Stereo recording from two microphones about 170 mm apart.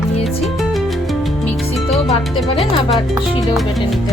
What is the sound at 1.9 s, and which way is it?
Speech, centre (ahead or behind).